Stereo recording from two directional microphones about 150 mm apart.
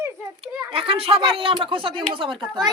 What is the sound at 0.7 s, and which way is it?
Speech, 40° right (ahead or behind).